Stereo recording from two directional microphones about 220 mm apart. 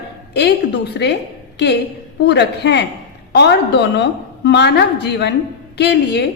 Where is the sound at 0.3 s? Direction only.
50° left (ahead or behind).